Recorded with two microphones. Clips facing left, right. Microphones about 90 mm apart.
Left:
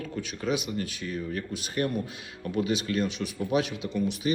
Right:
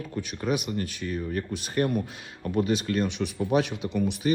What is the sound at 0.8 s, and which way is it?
Speech, 40° right (ahead or behind).